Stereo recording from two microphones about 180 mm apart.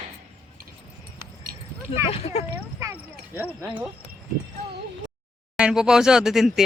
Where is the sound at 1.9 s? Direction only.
35° left (ahead or behind).